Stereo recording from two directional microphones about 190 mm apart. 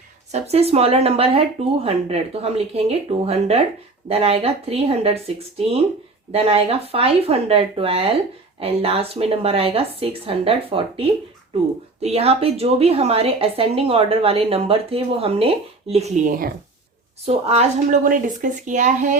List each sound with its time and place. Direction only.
0.3 s a woman's voice: 35° right (ahead or behind)
6.3 s a woman's voice: 30° right (ahead or behind)
17.2 s a woman's voice: 30° right (ahead or behind)